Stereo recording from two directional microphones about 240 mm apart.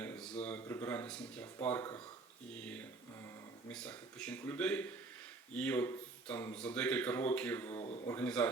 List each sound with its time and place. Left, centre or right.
0.0 s a sound: centre
0.4 s speech: centre
3.7 s speech: centre
7.8 s a man's voice: left
8.1 s speech: centre